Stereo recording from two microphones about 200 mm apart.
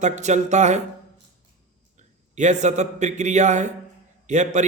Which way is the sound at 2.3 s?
35° right (ahead or behind).